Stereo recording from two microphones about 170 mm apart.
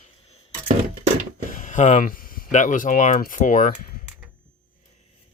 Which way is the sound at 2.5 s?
50° left (ahead or behind).